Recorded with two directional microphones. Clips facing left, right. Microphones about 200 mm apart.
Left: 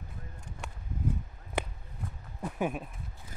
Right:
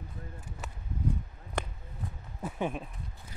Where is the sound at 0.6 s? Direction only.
Centre (ahead or behind).